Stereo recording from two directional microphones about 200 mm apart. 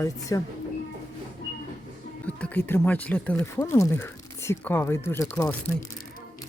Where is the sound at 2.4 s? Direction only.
10° left (ahead or behind).